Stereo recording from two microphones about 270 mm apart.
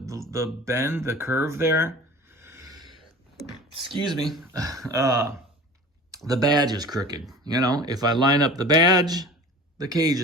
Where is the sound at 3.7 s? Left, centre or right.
Centre.